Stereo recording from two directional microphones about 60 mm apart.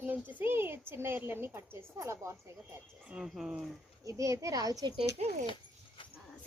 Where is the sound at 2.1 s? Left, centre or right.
Right.